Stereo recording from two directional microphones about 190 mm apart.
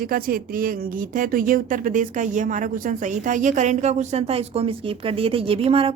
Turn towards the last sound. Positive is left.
turn(degrees=-30)  # may be behind; listen again after turning